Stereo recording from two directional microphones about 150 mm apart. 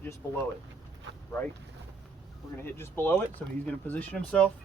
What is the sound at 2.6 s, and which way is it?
Speech, 15° left (ahead or behind).